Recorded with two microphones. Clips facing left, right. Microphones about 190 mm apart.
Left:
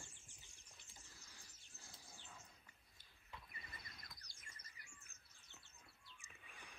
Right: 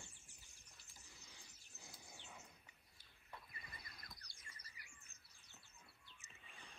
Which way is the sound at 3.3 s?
60° right (ahead or behind).